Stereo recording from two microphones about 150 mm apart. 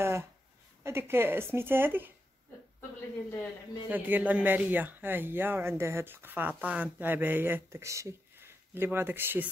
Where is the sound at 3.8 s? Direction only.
10° right (ahead or behind).